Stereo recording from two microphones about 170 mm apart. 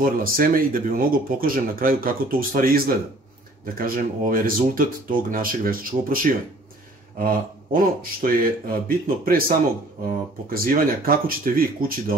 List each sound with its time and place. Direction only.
0.0 s speech: 55° right (ahead or behind)